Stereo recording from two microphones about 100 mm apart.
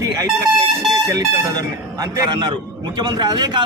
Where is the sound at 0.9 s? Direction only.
35° right (ahead or behind).